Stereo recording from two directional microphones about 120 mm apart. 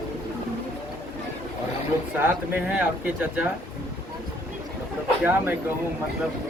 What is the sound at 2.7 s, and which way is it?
Speech, 15° right (ahead or behind).